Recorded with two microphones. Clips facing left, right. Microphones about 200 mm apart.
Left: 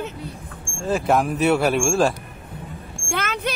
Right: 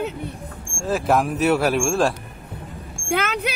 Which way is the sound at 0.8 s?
Centre (ahead or behind).